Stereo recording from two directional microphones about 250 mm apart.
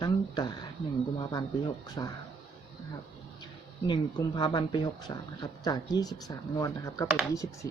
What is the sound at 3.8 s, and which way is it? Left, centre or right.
Speech, centre.